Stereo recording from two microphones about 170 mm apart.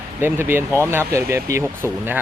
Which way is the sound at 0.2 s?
10° right (ahead or behind).